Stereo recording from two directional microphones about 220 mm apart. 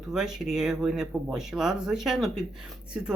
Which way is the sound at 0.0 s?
Centre (ahead or behind).